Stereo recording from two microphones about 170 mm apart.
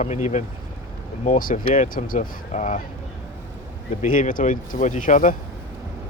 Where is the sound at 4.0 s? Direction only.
50° left (ahead or behind).